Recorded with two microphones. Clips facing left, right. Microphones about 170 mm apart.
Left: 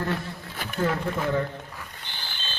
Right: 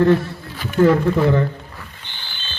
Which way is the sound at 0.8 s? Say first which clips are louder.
Right 12 dB; 90° right.